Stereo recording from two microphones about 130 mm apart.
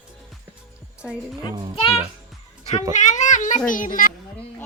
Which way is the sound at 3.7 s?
90° left.